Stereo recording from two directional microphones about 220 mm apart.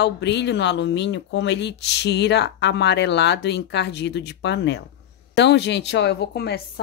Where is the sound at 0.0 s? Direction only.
50° left (ahead or behind).